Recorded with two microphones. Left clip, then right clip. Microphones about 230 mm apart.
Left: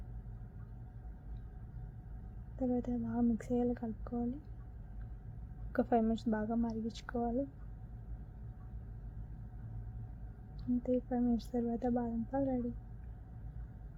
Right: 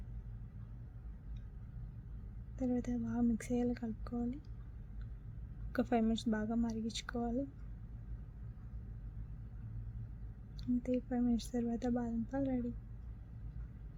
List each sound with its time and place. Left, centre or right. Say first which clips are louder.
2.6 s a woman's voice: left 2 dB; centre
5.7 s a woman's voice: left 3 dB; centre
10.6 s a woman's voice: left 2 dB; centre